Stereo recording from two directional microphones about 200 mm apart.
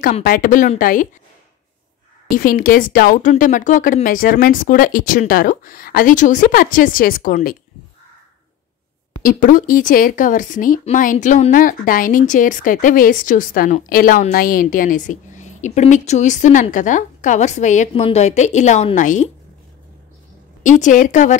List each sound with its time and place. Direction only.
0.0 s speech: 45° left (ahead or behind)
2.3 s speech: 45° left (ahead or behind)
9.2 s speech: 40° left (ahead or behind)
20.8 s speech: 40° left (ahead or behind)